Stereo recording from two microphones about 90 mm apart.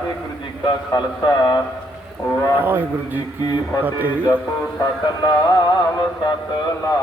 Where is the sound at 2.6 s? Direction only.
20° right (ahead or behind).